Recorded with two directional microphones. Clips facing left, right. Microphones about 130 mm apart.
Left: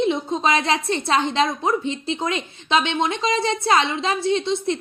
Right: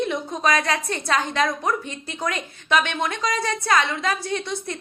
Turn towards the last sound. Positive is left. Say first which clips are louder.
# left 7 dB
turn(degrees=25)  # may be behind; listen again after turning